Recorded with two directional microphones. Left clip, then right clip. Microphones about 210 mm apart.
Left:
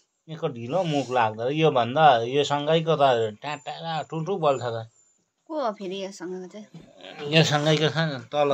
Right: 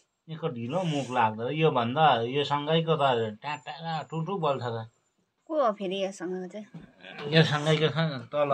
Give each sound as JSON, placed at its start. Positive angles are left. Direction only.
{"t": 0.3, "sound": "speech", "side_deg": 55}
{"t": 5.5, "sound": "speech", "side_deg": 0}
{"t": 7.0, "sound": "speech", "side_deg": 40}